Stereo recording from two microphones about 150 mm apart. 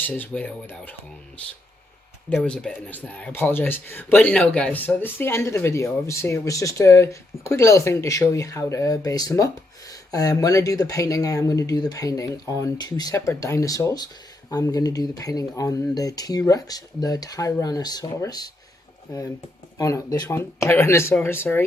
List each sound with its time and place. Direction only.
0.0 s speech: 10° left (ahead or behind)
2.3 s speech: 5° left (ahead or behind); by 18.5 s 25° left (ahead or behind)
19.8 s speech: 20° left (ahead or behind)